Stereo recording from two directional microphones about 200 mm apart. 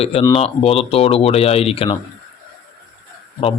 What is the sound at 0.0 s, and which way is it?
A man's voice, 30° left (ahead or behind).